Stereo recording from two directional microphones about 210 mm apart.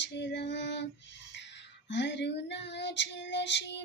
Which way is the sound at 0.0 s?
55° left (ahead or behind).